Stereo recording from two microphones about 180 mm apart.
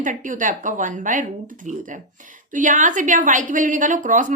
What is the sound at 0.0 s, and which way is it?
A woman's voice, 45° right (ahead or behind).